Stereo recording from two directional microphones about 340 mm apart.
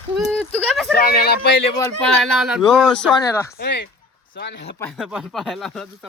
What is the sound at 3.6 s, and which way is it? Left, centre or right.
Speech, left.